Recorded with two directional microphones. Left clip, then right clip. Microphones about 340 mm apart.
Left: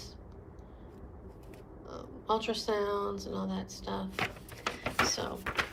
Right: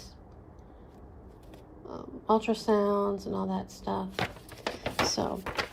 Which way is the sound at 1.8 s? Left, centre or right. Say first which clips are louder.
Right 5 dB; centre.